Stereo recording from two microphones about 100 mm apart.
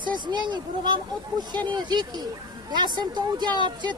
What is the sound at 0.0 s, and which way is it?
A child's voice, 50° right (ahead or behind).